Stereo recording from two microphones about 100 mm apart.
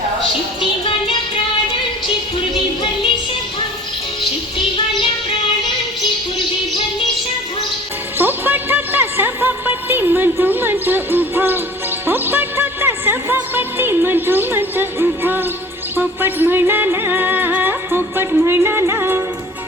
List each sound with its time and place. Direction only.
8.2 s music: 20° right (ahead or behind)